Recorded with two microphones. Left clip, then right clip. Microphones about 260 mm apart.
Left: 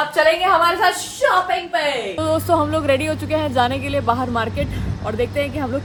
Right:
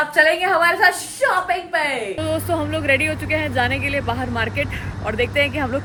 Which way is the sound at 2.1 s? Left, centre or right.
Centre.